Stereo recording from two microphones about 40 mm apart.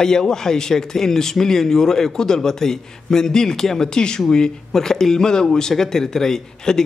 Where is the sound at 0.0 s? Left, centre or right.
Centre.